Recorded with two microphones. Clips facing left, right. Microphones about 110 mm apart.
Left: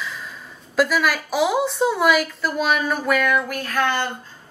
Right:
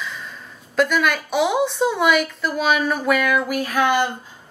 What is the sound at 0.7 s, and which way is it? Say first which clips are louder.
A woman's voice: right 1 dB; 5° left (ahead or behind).